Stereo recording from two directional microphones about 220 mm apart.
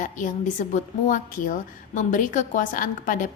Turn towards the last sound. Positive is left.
turn(degrees=40)  # may be behind; listen again after turning